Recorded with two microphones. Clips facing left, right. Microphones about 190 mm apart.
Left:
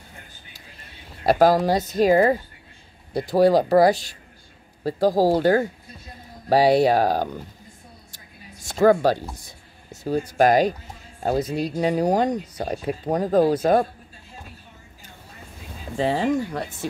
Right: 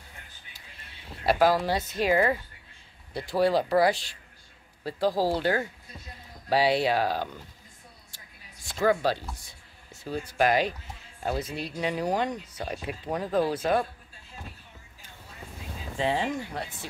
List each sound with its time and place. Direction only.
1.2 s speech: 40° left (ahead or behind)
8.6 s speech: 45° left (ahead or behind)
16.0 s speech: 40° left (ahead or behind)